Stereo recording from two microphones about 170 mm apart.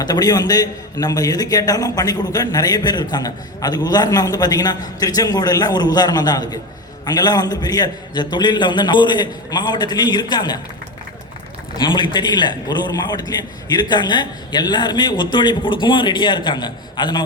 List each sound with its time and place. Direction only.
0.0 s a man's voice: 25° left (ahead or behind)
11.8 s a man's voice: 25° left (ahead or behind)